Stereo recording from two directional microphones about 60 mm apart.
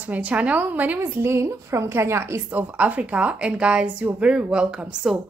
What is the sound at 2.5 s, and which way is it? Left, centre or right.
A woman's voice, right.